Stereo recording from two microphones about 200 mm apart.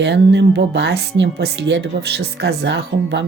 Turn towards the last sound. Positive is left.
turn(degrees=-60)  # may be behind; listen again after turning